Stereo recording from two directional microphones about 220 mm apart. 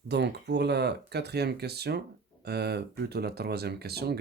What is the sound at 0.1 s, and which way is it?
Speech, 50° right (ahead or behind).